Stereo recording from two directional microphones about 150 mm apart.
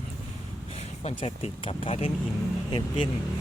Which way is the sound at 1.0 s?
40° left (ahead or behind).